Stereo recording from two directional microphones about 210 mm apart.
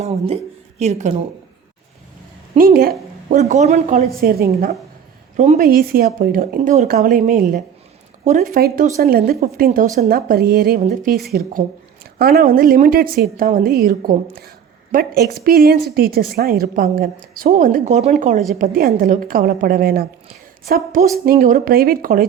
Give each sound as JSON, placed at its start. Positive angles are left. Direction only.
{"t": 0.8, "sound": "a woman's voice", "side_deg": -35}
{"t": 2.6, "sound": "a woman's voice", "side_deg": -45}
{"t": 4.2, "sound": "a woman's voice", "side_deg": -45}
{"t": 14.9, "sound": "a woman's voice", "side_deg": -45}